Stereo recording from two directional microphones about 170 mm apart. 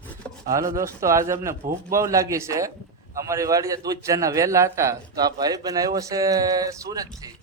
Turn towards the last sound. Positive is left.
turn(degrees=-20)  # may be behind; listen again after turning